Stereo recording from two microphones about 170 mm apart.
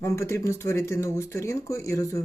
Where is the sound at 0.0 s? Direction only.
15° left (ahead or behind).